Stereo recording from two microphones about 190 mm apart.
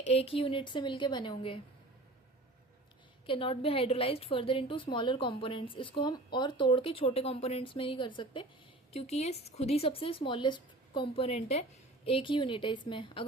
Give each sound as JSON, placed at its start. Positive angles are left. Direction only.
{"t": 0.1, "sound": "a woman's voice", "side_deg": 30}
{"t": 3.2, "sound": "a woman's voice", "side_deg": 30}